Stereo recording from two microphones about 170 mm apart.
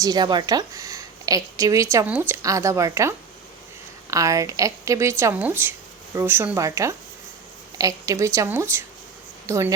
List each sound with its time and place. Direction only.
0.0 s a woman's voice: 25° right (ahead or behind)